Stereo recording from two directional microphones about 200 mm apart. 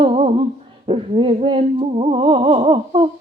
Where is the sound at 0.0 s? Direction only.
30° right (ahead or behind).